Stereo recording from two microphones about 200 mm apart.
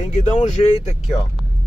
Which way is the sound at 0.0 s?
35° left (ahead or behind).